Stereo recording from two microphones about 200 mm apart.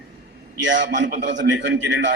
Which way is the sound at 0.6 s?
65° right (ahead or behind).